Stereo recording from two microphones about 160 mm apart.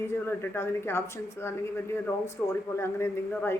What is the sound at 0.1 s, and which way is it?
A woman's voice, 15° left (ahead or behind).